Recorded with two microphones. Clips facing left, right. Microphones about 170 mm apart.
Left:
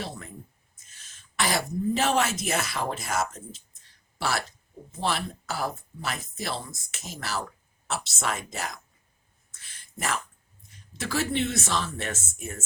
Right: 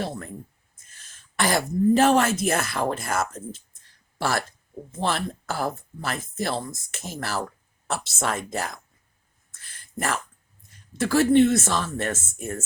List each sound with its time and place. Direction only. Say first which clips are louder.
0.0 s speech: right 6 dB; 50° right (ahead or behind)
1.4 s speech: right 5 dB; 50° right (ahead or behind)
9.6 s a sound: right 5 dB; 55° right (ahead or behind)
10.9 s speech: right 10 dB; 55° right (ahead or behind)